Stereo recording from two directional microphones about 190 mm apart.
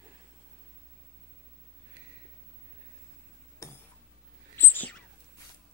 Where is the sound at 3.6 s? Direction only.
15° left (ahead or behind).